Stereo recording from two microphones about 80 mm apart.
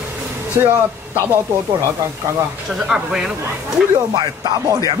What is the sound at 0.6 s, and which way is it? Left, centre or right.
Speech, right.